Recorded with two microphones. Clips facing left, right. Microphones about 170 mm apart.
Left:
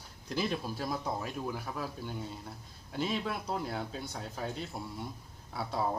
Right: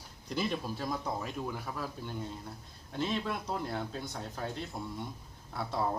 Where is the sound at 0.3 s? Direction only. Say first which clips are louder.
Even; centre (ahead or behind).